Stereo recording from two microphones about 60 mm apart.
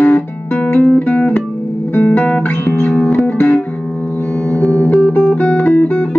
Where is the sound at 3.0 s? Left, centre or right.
Left.